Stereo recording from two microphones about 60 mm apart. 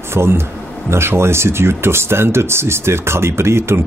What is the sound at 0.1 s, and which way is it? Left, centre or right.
Speech, right.